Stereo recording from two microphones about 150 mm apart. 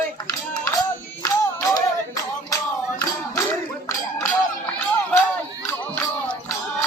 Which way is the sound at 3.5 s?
15° left (ahead or behind).